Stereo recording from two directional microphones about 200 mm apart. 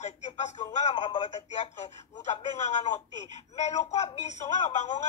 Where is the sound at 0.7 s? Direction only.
30° left (ahead or behind).